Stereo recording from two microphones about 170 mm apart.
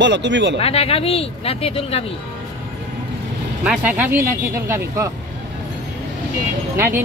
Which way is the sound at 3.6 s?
10° right (ahead or behind).